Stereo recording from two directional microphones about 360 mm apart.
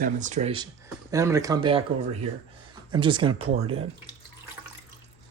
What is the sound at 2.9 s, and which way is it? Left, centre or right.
Speech, centre.